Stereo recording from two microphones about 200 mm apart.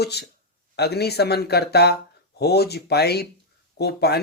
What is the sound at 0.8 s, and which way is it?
Speech, 55° left (ahead or behind).